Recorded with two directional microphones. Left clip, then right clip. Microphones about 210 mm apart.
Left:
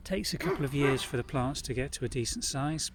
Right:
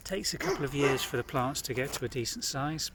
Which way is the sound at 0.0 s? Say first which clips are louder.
Even; 20° left (ahead or behind).